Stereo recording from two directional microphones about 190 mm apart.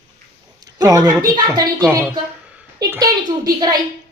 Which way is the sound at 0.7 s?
20° right (ahead or behind).